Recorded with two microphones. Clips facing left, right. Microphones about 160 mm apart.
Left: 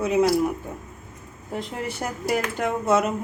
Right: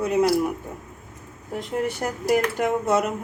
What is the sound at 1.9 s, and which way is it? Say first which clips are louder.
Speech: right 2 dB; centre (ahead or behind).